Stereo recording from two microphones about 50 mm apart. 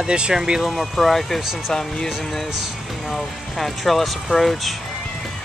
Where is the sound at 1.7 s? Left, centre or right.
Centre.